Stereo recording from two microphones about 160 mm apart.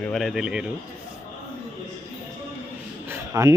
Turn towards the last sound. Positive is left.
turn(degrees=-20)  # may be behind; listen again after turning